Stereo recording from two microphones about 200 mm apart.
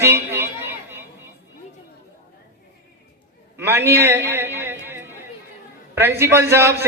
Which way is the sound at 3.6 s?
10° right (ahead or behind).